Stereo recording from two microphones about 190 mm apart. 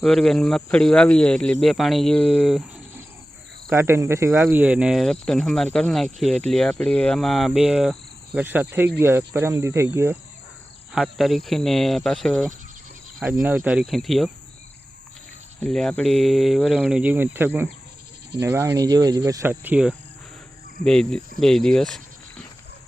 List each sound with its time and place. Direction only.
0.0 s speech: 5° left (ahead or behind)
3.7 s speech: 15° right (ahead or behind)
8.4 s cricket: 10° right (ahead or behind)
10.9 s speech: centre (ahead or behind)
13.4 s speech: 10° right (ahead or behind)
15.6 s speech: 5° left (ahead or behind)
18.3 s cricket: 15° right (ahead or behind)
20.8 s speech: 5° left (ahead or behind)